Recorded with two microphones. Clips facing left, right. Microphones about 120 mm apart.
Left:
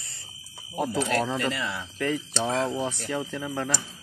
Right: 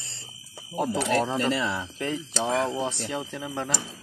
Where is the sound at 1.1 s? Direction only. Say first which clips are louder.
Right 2 dB; 25° right (ahead or behind).